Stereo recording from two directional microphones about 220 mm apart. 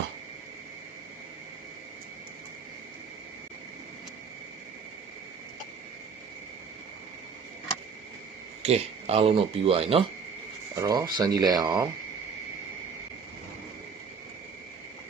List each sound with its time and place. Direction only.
8.6 s speech: 30° right (ahead or behind)